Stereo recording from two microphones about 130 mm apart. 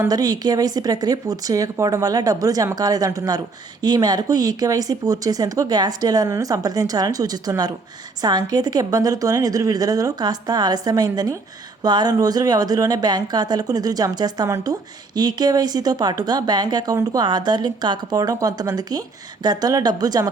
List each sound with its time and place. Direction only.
0.1 s speech: 30° right (ahead or behind)